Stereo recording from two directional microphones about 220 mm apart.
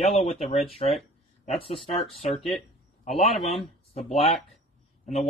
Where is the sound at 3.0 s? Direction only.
25° left (ahead or behind).